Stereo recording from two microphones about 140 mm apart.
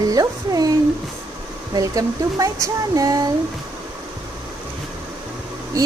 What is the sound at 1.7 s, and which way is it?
Speech, 25° right (ahead or behind).